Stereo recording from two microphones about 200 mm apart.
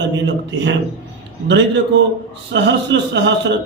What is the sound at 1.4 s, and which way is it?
A man's voice, 65° right (ahead or behind).